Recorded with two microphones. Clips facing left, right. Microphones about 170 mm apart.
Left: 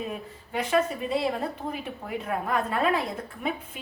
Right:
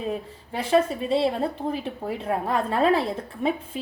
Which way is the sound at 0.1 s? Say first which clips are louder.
Right 3 dB; 30° right (ahead or behind).